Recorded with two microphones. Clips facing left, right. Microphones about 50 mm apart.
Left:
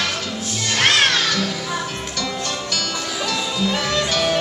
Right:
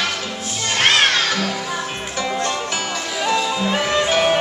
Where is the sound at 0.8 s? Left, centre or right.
Centre.